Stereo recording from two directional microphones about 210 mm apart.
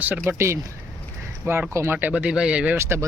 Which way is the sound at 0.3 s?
15° right (ahead or behind).